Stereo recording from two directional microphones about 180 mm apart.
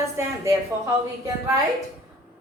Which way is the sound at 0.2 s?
15° right (ahead or behind).